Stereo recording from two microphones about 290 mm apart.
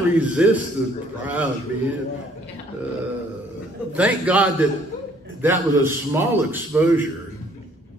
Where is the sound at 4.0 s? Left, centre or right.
Centre.